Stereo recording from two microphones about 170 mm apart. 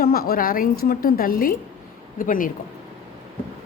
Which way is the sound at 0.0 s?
60° left (ahead or behind).